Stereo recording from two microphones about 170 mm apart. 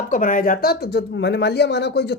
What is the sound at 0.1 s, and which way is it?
Speech, 55° left (ahead or behind).